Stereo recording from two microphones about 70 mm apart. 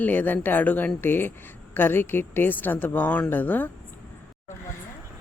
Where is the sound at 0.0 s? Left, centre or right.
Left.